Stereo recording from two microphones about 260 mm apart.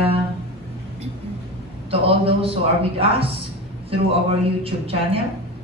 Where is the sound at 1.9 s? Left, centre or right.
Right.